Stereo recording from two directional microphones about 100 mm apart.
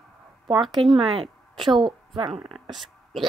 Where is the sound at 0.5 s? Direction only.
50° right (ahead or behind).